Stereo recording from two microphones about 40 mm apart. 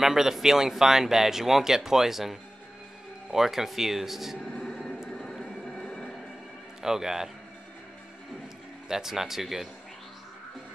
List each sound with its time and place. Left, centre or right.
0.0 s speech: centre
4.5 s music: centre
5.1 s a sound: centre
6.8 s speech: centre
8.8 s speech: centre